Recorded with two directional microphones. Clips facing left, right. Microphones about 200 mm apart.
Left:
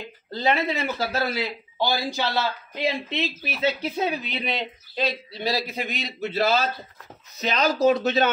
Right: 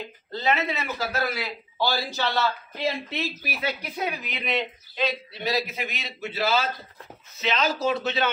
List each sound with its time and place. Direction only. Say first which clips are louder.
0.3 s speech: left 2 dB; 30° left (ahead or behind)